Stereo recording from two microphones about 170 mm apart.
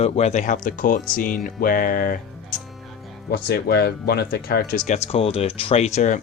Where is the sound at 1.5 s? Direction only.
55° left (ahead or behind).